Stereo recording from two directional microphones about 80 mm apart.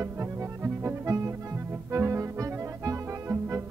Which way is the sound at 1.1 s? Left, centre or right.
Right.